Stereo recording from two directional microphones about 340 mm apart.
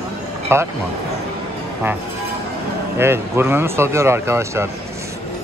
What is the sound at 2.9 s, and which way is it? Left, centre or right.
Speech, centre.